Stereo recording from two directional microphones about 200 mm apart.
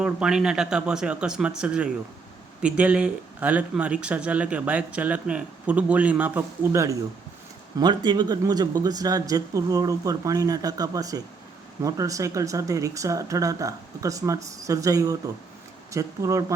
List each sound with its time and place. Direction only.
0.0 s speech: 5° right (ahead or behind)